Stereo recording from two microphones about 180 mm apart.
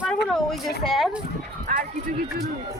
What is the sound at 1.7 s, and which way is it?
Music, 45° right (ahead or behind).